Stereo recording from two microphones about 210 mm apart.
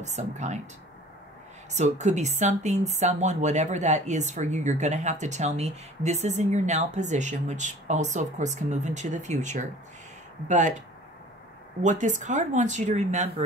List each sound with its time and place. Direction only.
0.0 s speech: 35° right (ahead or behind)
1.7 s speech: 35° right (ahead or behind)
11.8 s speech: 35° right (ahead or behind)